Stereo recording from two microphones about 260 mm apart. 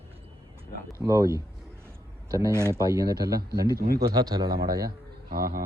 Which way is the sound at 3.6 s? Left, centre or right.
Right.